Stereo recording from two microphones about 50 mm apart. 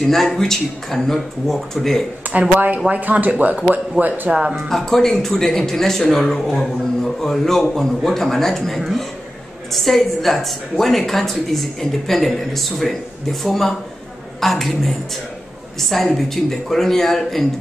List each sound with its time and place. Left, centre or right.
0.0 s speech: centre
2.3 s a sound: right
2.9 s speech: right
4.6 s a woman's voice: centre